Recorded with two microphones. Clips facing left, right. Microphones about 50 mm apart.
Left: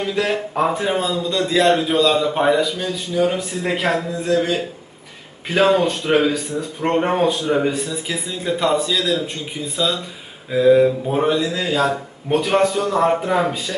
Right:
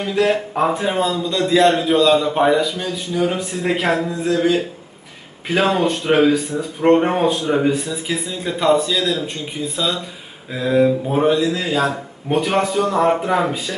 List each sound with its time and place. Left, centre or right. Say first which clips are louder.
0.0 s a man's voice: right 3 dB; centre